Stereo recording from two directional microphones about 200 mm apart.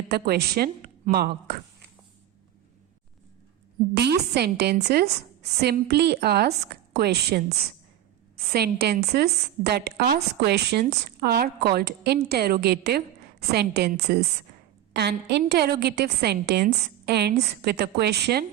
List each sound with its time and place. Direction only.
0.1 s a woman's voice: 50° right (ahead or behind)
3.9 s a woman's voice: 55° right (ahead or behind)
8.5 s a woman's voice: 55° right (ahead or behind)